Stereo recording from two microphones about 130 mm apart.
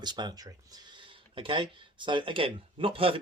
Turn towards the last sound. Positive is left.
turn(degrees=-45)  # may be behind; listen again after turning